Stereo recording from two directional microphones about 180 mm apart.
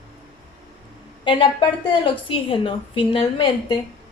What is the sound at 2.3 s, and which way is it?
A woman's voice, 30° left (ahead or behind).